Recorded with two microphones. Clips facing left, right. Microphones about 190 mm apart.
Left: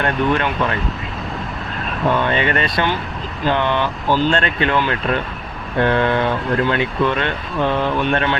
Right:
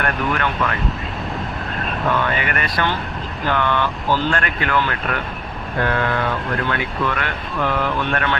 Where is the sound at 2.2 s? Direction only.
25° left (ahead or behind).